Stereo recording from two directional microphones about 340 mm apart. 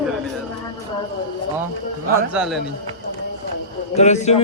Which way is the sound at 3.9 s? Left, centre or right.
Centre.